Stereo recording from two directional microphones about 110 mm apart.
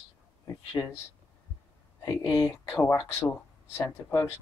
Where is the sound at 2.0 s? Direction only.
35° left (ahead or behind).